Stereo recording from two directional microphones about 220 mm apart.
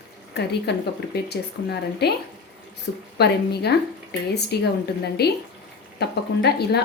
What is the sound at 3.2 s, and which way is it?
A woman's voice, 45° left (ahead or behind).